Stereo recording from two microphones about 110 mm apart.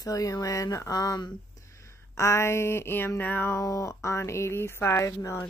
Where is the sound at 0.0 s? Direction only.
30° left (ahead or behind).